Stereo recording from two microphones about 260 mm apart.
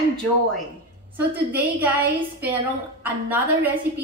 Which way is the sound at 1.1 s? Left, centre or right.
Centre.